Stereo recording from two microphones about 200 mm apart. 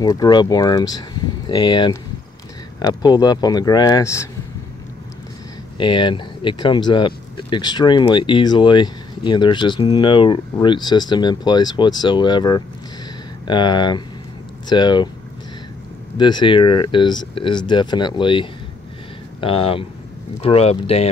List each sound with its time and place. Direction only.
0.0 s speech: 20° left (ahead or behind)
5.8 s speech: 25° left (ahead or behind)
16.2 s speech: 20° left (ahead or behind)